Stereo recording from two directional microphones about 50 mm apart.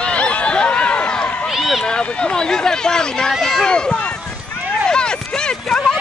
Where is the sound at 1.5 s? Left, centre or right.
Centre.